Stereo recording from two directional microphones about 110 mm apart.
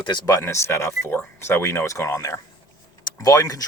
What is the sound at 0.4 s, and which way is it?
Speech, 25° left (ahead or behind).